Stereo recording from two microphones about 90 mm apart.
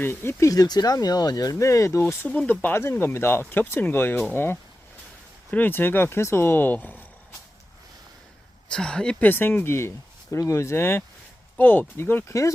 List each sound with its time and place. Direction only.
0.0 s speech: 25° left (ahead or behind)
2.2 s speech: 15° left (ahead or behind)
5.5 s speech: 20° left (ahead or behind)
8.7 s speech: 10° left (ahead or behind)
9.3 s speech: 25° left (ahead or behind)